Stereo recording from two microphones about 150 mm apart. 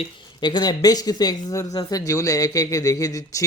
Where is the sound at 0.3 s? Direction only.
30° left (ahead or behind).